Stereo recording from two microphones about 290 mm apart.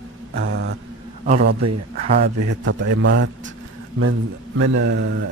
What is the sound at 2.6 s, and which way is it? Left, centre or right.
Speech, right.